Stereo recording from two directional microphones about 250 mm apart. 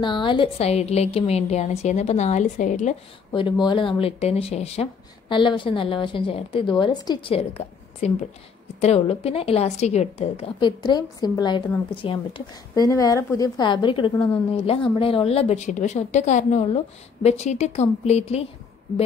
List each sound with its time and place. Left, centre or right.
0.0 s a woman's voice: centre
3.3 s a woman's voice: centre